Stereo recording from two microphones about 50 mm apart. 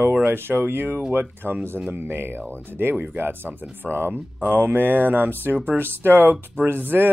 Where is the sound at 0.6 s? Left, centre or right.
Right.